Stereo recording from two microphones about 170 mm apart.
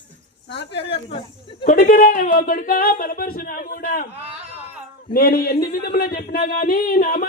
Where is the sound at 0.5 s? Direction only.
90° left.